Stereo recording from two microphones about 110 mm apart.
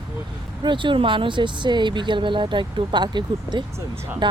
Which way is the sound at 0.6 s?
45° right (ahead or behind).